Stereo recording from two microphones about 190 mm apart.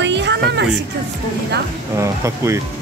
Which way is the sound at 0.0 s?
65° right (ahead or behind).